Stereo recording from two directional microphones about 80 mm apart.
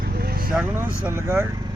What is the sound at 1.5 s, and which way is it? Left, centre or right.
Vehicle, right.